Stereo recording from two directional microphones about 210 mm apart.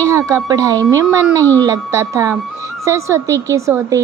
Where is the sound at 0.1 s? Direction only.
15° right (ahead or behind).